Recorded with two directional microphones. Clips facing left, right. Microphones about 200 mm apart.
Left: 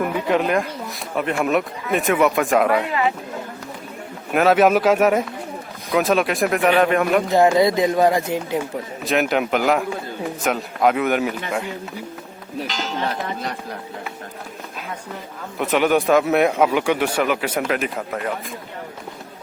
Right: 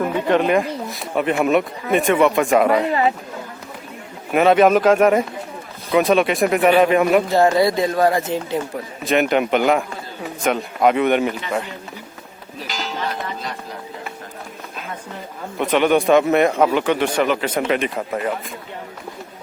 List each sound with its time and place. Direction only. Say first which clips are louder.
0.3 s speech: right 4 dB; centre (ahead or behind)
4.3 s speech: right 2 dB; centre (ahead or behind)
7.3 s speech: even; 15° left (ahead or behind)
9.0 s speech: right 3 dB; centre (ahead or behind)
15.5 s speech: right 2 dB; 5° left (ahead or behind)